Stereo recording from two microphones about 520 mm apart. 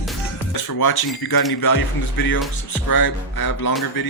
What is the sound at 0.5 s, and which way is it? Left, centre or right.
Speech, left.